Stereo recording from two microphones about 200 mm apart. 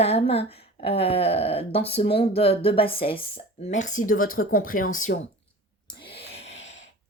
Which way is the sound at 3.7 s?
40° left (ahead or behind).